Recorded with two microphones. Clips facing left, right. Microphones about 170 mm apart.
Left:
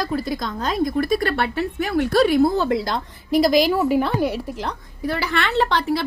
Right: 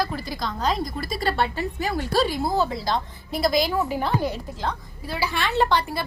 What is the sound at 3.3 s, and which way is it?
A woman's voice, 80° left.